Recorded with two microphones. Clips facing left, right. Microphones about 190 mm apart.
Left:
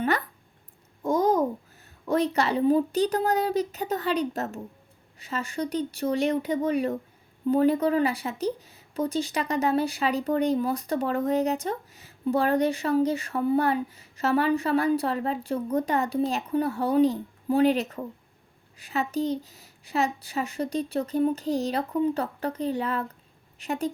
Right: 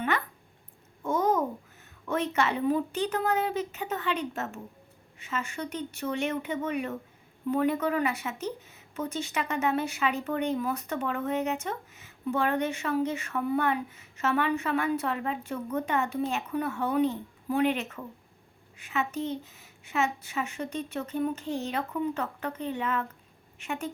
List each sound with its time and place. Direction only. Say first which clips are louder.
1.0 s babbling: left 4 dB; 35° left (ahead or behind)
2.0 s speech: left 4 dB; 35° left (ahead or behind)